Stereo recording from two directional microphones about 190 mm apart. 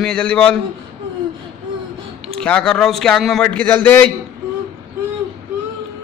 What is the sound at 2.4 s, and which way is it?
A man's voice, 5° left (ahead or behind).